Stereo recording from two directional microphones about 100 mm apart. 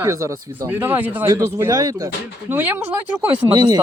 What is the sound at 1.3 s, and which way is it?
A man's voice, 30° right (ahead or behind).